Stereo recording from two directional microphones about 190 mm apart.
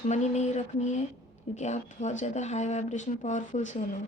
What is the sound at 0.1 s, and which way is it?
A woman's voice, 35° left (ahead or behind).